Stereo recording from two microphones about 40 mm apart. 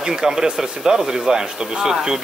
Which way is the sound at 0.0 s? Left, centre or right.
Centre.